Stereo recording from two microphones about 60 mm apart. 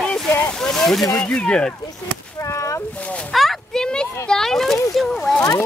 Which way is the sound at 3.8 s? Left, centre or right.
Centre.